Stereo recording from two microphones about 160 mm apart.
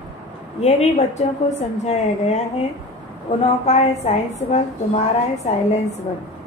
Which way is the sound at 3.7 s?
45° left (ahead or behind).